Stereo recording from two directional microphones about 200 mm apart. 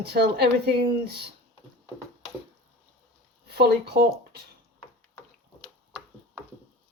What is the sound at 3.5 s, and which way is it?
Speech, 55° right (ahead or behind).